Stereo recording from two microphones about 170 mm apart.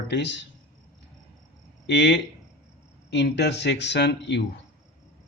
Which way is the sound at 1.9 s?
85° left.